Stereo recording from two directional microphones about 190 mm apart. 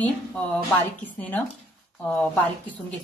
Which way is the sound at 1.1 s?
10° left (ahead or behind).